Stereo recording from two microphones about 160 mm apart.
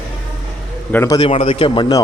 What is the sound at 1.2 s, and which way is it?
Speech, 40° left (ahead or behind).